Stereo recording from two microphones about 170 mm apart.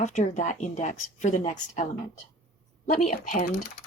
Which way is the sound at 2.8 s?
45° left (ahead or behind).